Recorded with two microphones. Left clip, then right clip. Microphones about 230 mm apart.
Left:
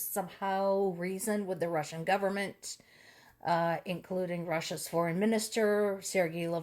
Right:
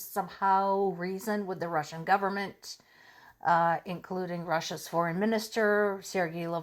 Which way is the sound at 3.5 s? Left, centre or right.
Right.